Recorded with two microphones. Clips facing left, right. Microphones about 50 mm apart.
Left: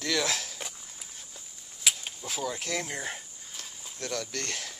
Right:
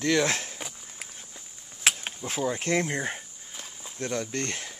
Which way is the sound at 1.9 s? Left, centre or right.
Right.